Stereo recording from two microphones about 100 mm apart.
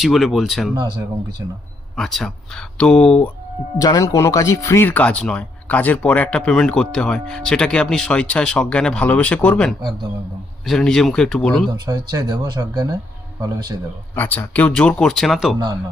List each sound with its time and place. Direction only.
0.0 s speech: centre (ahead or behind)
2.0 s speech: 5° left (ahead or behind)
3.8 s speech: 35° left (ahead or behind)
4.9 s speech: 15° left (ahead or behind)
11.9 s speech: 40° right (ahead or behind)
14.2 s speech: 15° left (ahead or behind); by 15.5 s centre (ahead or behind)